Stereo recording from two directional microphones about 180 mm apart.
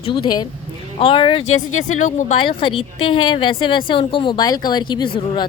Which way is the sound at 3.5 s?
30° left (ahead or behind).